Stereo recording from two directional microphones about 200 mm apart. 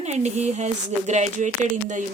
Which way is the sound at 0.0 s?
35° right (ahead or behind).